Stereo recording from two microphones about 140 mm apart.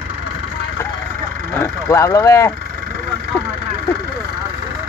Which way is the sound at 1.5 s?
20° left (ahead or behind).